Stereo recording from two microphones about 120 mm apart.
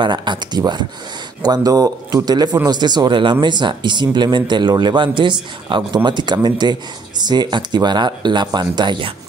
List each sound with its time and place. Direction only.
0.0 s speech: 40° right (ahead or behind)